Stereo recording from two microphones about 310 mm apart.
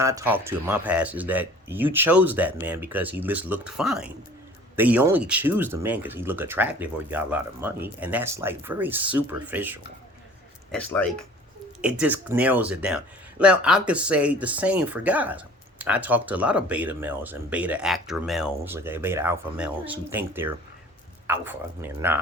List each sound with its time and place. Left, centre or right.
0.0 s speech: centre